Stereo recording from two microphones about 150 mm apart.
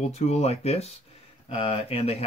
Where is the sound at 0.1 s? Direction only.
45° left (ahead or behind).